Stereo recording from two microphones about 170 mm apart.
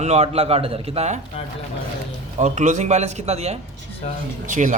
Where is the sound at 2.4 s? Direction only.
45° right (ahead or behind).